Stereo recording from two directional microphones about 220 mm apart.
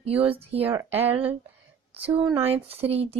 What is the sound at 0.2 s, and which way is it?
Speech, 25° right (ahead or behind).